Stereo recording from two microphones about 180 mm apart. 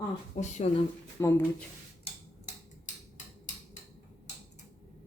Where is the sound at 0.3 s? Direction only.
40° left (ahead or behind).